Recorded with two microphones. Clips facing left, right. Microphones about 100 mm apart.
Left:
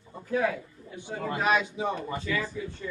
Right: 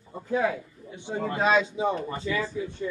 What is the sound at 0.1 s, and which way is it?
A man's voice, 25° right (ahead or behind).